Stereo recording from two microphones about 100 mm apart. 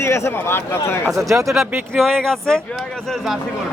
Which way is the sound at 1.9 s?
Centre (ahead or behind).